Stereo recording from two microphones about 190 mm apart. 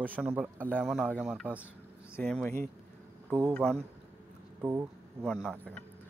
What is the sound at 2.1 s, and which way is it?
A man's voice, 5° left (ahead or behind).